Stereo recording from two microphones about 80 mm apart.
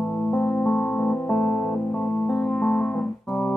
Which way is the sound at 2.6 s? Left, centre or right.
Centre.